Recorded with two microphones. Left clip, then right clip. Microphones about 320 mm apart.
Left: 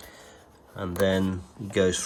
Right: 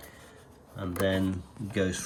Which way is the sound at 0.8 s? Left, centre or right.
Centre.